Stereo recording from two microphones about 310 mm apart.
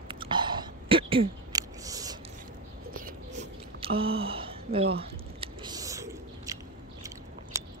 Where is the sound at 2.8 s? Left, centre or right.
Right; by 6.6 s centre.